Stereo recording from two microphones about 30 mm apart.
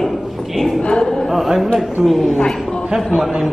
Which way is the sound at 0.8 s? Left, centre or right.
Left.